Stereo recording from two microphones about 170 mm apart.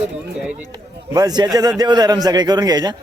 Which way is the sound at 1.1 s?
25° right (ahead or behind).